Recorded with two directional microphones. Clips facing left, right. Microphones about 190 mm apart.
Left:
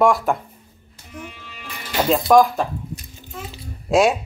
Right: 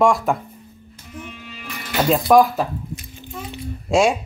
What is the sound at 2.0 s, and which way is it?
Speech, centre (ahead or behind).